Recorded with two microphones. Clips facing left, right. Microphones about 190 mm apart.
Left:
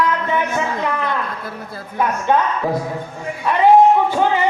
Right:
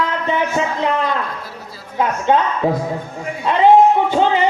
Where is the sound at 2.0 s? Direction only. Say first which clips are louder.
Right 1 dB; 20° right (ahead or behind).